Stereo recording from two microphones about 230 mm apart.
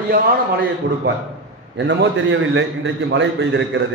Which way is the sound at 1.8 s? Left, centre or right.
Right.